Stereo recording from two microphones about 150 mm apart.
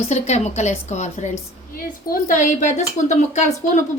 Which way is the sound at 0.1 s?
50° left (ahead or behind).